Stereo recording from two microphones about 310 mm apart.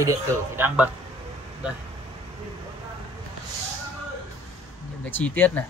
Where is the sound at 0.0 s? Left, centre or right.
Centre.